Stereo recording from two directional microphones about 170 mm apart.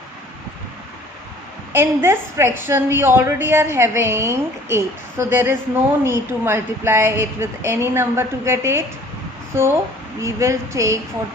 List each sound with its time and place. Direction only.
1.7 s a woman's voice: 15° right (ahead or behind)